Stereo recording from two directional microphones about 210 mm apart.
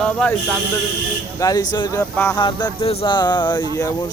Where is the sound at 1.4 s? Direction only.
15° left (ahead or behind).